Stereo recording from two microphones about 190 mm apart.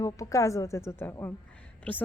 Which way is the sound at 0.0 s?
15° left (ahead or behind).